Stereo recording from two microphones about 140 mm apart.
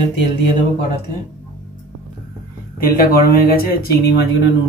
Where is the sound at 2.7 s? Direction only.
90° left.